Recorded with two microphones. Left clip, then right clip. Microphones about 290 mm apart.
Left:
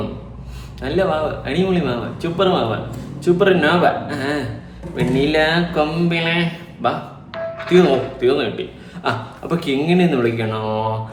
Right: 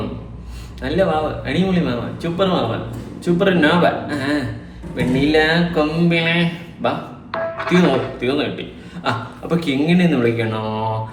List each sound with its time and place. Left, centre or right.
0.8 s speech: centre
7.3 s music: right
8.2 s speech: centre